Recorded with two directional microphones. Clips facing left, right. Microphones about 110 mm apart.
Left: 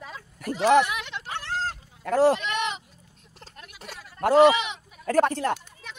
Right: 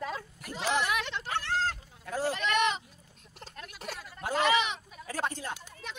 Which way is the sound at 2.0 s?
80° left.